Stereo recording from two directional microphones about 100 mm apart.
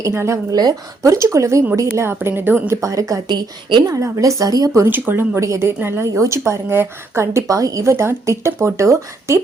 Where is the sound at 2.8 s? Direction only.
35° right (ahead or behind); by 3.8 s 50° right (ahead or behind).